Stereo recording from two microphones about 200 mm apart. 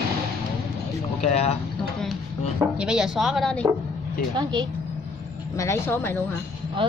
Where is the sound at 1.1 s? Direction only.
30° left (ahead or behind).